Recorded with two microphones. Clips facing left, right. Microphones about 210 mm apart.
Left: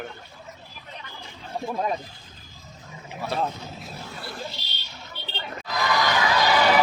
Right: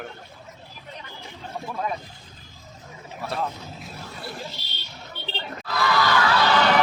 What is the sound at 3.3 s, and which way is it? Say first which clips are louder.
Speech: left 2 dB; centre (ahead or behind).